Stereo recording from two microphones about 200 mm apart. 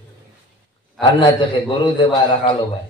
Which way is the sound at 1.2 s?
25° left (ahead or behind).